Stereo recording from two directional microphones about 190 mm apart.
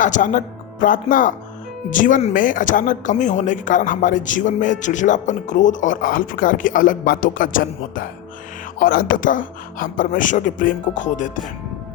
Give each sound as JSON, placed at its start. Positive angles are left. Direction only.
{"t": 0.0, "sound": "speech", "side_deg": 45}